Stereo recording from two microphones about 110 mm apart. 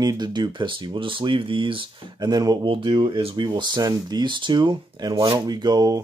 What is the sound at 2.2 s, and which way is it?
Speech, 35° right (ahead or behind).